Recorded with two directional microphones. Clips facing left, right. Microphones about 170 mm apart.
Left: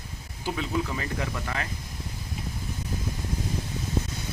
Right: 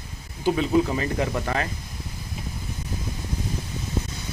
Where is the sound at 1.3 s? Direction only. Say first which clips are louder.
Right 6 dB; 40° right (ahead or behind).